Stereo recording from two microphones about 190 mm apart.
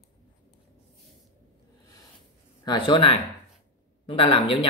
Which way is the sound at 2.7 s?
25° left (ahead or behind).